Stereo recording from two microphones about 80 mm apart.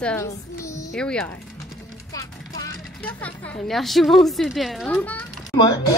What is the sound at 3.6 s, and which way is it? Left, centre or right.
A woman's voice, centre.